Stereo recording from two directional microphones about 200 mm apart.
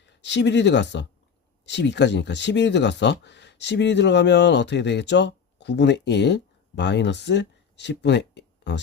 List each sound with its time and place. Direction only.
0.0 s speech: 60° left (ahead or behind)